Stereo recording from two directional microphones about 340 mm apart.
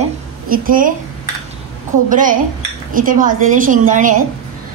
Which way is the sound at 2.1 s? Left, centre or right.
Right.